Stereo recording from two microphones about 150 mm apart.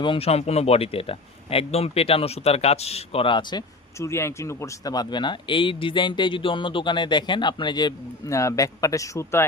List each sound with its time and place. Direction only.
0.0 s speech: 35° left (ahead or behind)
4.0 s speech: 20° left (ahead or behind)